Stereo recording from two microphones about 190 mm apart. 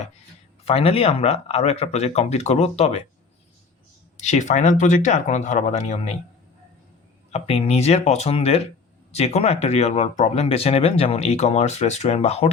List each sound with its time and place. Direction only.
0.6 s speech: 30° left (ahead or behind)
4.2 s speech: 40° left (ahead or behind)
7.3 s speech: 35° left (ahead or behind)